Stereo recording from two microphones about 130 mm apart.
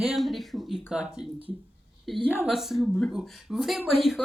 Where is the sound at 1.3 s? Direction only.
40° right (ahead or behind).